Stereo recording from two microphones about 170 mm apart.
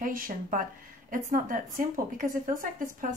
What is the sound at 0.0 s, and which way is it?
A woman's voice, 55° right (ahead or behind).